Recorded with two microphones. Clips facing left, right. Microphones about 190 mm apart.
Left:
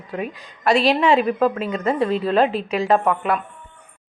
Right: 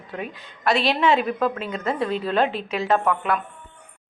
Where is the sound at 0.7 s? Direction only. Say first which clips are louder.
Left 5 dB; 35° left (ahead or behind).